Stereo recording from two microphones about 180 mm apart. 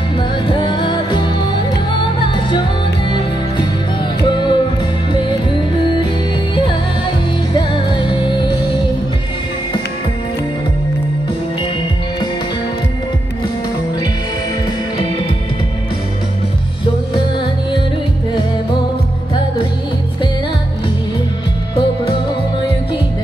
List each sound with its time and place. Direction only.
0.5 s music: 25° left (ahead or behind)
4.2 s music: 25° left (ahead or behind)